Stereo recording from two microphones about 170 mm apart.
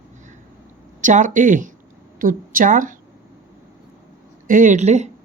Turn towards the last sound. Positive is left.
turn(degrees=-45)  # may be behind; listen again after turning